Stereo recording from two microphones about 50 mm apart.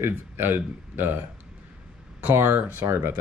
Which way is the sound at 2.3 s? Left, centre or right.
Right.